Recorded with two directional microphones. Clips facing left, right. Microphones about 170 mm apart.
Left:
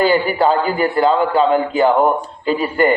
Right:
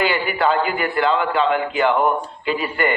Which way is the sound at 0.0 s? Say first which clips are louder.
Left 5 dB; 40° left (ahead or behind).